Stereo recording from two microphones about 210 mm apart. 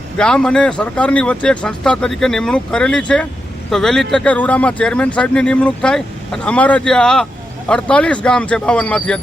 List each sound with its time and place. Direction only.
0.2 s speech: 5° left (ahead or behind)